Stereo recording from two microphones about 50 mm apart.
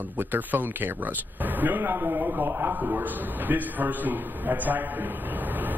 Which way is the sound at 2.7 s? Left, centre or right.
Right.